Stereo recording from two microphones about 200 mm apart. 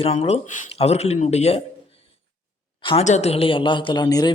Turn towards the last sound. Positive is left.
turn(degrees=20)  # may be behind; listen again after turning